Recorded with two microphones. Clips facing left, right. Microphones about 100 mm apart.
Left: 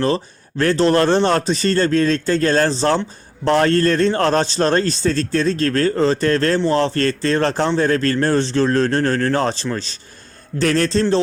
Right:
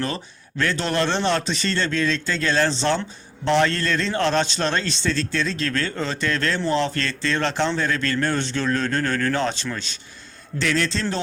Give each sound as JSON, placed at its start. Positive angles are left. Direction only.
{"t": 0.6, "sound": "a man's voice", "side_deg": 35}